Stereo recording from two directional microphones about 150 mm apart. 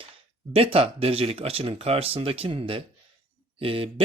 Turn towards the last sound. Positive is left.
turn(degrees=-40)  # may be behind; listen again after turning